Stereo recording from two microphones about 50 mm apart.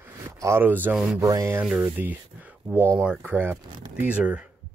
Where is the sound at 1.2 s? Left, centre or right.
Right.